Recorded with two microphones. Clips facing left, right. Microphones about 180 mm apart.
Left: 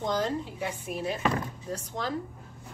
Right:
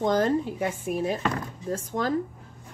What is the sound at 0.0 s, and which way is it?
A woman's voice, 50° right (ahead or behind).